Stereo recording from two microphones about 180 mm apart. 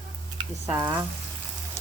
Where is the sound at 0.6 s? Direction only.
15° right (ahead or behind).